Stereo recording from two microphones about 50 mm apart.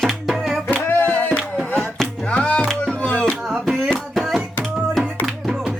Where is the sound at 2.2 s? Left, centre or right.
Left.